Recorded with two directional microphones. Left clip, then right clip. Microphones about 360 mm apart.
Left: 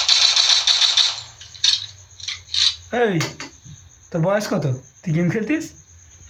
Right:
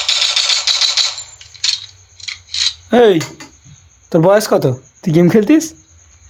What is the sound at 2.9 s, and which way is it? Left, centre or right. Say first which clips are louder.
Speech: right 11 dB; centre.